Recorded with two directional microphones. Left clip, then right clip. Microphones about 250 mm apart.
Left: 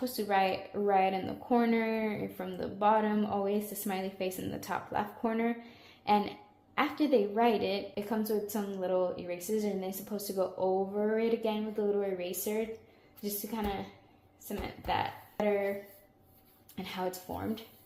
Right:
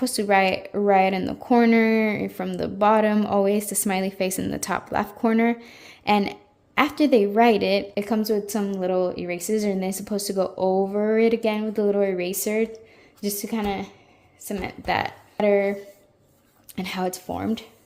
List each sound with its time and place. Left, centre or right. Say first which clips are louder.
0.0 s speech: right 10 dB; right
16.7 s speech: right 9 dB; right